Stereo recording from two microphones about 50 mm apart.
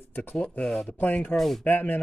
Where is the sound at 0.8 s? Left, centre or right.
Left.